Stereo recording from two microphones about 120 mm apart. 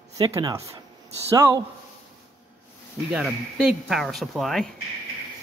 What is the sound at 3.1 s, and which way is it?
Speech, 5° right (ahead or behind).